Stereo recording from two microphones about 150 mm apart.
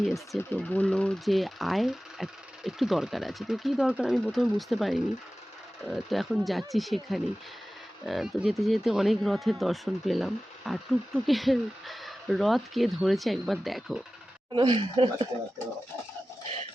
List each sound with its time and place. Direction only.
0.5 s speech: 10° left (ahead or behind)
14.5 s speech: 35° right (ahead or behind)